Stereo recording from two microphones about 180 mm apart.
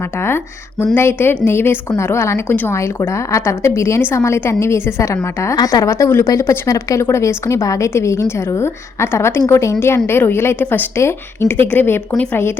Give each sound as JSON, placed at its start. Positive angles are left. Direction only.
{"t": 0.2, "sound": "a woman's voice", "side_deg": 15}